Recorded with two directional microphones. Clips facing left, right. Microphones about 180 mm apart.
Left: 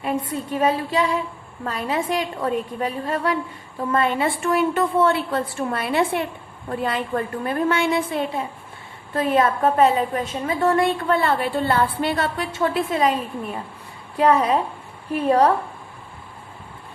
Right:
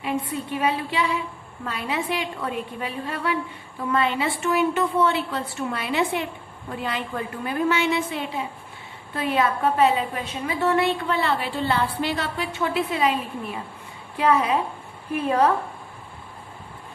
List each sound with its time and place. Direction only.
0.0 s a woman's voice: 45° left (ahead or behind)